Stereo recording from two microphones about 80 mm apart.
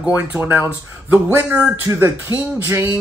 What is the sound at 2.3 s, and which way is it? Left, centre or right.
Speech, left.